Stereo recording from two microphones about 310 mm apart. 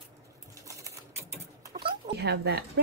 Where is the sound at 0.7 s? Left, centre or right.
Centre.